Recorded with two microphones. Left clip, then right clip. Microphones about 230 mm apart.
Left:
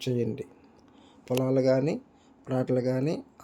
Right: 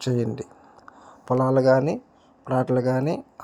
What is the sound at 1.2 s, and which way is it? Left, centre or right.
Speech, centre.